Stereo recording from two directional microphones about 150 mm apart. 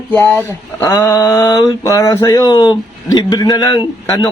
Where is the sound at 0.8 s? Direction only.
20° left (ahead or behind).